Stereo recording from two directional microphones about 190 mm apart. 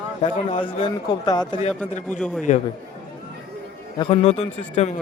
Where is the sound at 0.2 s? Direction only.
30° left (ahead or behind).